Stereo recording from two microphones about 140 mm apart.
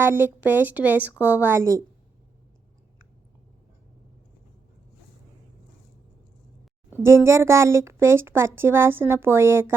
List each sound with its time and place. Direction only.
0.0 s speech: 15° right (ahead or behind)
6.9 s speech: 15° right (ahead or behind)